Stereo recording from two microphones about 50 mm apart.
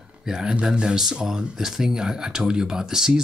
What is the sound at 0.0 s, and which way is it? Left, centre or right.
Speech, centre.